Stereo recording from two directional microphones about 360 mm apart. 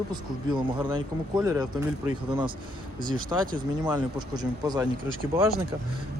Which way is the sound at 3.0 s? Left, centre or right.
Right.